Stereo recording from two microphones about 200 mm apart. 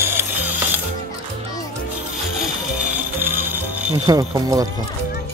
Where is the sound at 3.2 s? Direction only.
10° right (ahead or behind).